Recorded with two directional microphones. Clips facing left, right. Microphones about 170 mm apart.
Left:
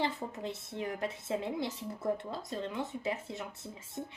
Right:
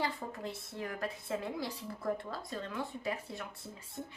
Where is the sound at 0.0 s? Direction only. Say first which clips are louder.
Left 2 dB; 20° left (ahead or behind).